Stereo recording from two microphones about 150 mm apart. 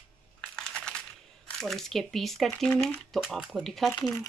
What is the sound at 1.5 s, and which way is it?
Speech, centre (ahead or behind).